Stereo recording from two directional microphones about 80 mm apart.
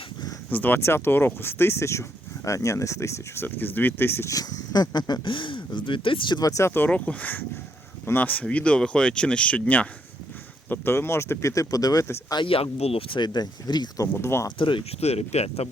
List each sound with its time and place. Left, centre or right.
0.5 s speech: left
3.4 s speech: left
4.3 s speech: left
6.7 s speech: left
10.7 s speech: left
12.3 s speech: left
14.1 s speech: left
14.6 s speech: left